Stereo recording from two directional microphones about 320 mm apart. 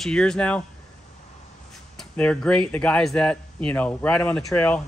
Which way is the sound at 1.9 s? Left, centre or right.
Centre.